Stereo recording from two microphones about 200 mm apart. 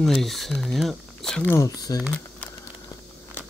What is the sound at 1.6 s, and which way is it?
Speech, 20° left (ahead or behind).